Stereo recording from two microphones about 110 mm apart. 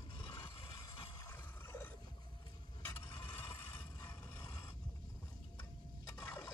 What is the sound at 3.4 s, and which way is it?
Mechanisms, 20° left (ahead or behind).